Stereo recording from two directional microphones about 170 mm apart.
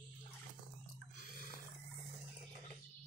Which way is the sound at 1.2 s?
55° left (ahead or behind).